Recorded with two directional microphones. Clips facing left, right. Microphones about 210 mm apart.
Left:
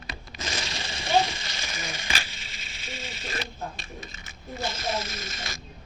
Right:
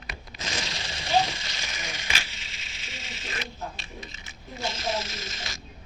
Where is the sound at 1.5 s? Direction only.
50° left (ahead or behind).